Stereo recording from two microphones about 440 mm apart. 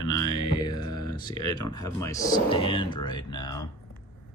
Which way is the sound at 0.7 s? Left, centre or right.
Centre.